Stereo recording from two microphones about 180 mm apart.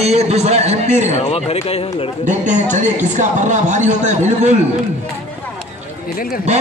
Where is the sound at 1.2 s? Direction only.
35° left (ahead or behind).